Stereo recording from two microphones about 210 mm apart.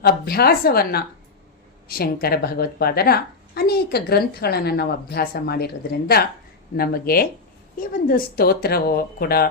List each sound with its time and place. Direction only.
0.0 s a woman's voice: 45° left (ahead or behind)